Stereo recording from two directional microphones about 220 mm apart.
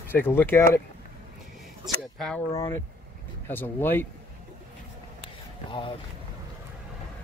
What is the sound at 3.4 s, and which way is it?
Speech, 10° left (ahead or behind).